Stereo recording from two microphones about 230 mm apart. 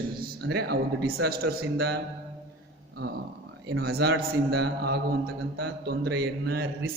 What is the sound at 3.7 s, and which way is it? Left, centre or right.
A man's voice, right.